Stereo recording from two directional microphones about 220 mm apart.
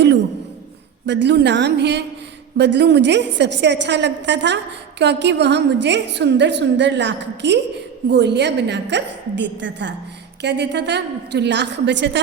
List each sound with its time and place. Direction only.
1.0 s a woman's voice: 55° right (ahead or behind)